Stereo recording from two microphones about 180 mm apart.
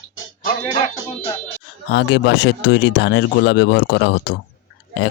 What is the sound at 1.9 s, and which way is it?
A man's voice, 75° left (ahead or behind).